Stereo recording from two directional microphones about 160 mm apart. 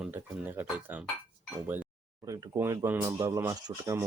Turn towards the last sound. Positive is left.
turn(degrees=-20)  # may be behind; listen again after turning